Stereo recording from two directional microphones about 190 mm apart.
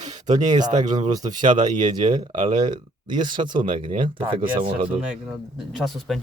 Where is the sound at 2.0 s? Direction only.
35° right (ahead or behind).